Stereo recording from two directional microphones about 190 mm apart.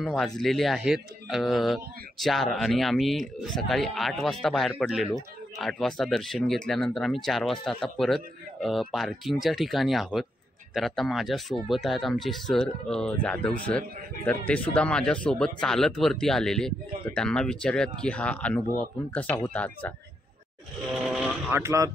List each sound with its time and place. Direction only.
0.0 s speech: centre (ahead or behind)
20.9 s vehicle: 5° right (ahead or behind)
21.5 s speech: 15° right (ahead or behind)